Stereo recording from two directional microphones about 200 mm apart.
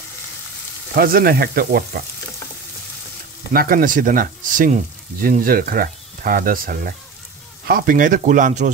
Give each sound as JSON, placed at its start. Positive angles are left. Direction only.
{"t": 0.9, "sound": "speech", "side_deg": -45}
{"t": 3.5, "sound": "speech", "side_deg": -45}